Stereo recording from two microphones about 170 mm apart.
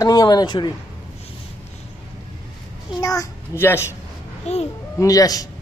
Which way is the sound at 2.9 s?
20° left (ahead or behind).